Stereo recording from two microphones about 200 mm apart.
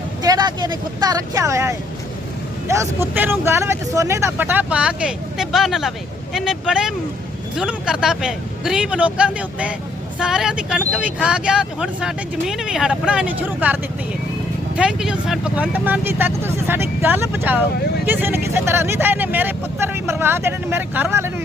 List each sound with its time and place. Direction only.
0.2 s speech: 20° right (ahead or behind)
14.8 s speech: 5° right (ahead or behind)